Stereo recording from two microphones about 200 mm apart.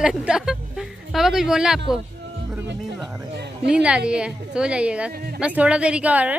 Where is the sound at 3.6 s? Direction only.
5° right (ahead or behind).